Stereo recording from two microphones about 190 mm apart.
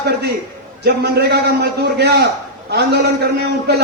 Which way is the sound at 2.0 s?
55° right (ahead or behind).